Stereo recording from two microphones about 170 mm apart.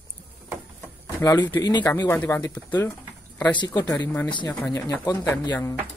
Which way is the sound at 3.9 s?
10° left (ahead or behind).